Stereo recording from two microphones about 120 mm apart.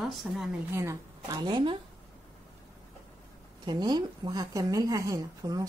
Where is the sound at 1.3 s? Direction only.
35° right (ahead or behind).